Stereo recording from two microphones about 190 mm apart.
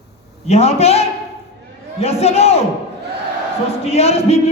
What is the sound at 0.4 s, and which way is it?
A man's voice, 35° left (ahead or behind).